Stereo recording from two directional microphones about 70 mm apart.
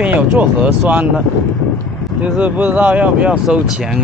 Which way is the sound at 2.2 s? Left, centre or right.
Right.